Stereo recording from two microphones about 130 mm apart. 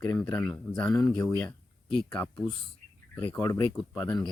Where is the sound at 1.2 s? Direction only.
20° left (ahead or behind).